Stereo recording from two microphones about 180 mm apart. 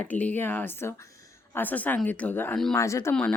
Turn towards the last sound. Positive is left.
turn(degrees=5)  # may be behind; listen again after turning